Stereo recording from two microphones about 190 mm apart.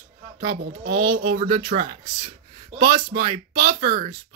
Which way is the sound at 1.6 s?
25° right (ahead or behind).